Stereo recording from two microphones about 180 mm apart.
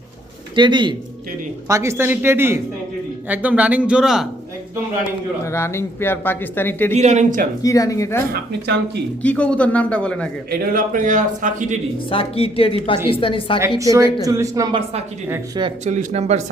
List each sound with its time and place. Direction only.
0.5 s speech: 25° right (ahead or behind)
1.6 s speech: 15° right (ahead or behind)
5.5 s speech: 15° left (ahead or behind)
6.9 s speech: 40° right (ahead or behind)
7.6 s speech: 20° left (ahead or behind)
8.3 s speech: 70° right (ahead or behind)
9.2 s speech: 5° left (ahead or behind)
10.5 s a man's voice: 50° right (ahead or behind)
12.1 s a woman's voice: 30° left (ahead or behind)
14.3 s speech: 20° right (ahead or behind)
15.8 s speech: 40° right (ahead or behind)